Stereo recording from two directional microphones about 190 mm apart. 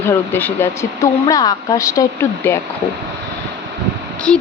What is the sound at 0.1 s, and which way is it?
Speech, 10° left (ahead or behind).